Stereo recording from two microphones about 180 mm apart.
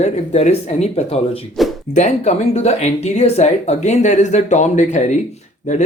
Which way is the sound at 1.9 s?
40° left (ahead or behind).